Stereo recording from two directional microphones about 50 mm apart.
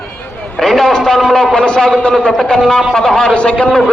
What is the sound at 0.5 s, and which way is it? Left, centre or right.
A man's voice, centre.